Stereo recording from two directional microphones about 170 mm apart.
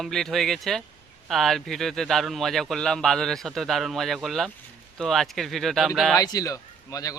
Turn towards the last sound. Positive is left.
turn(degrees=20)  # may be behind; listen again after turning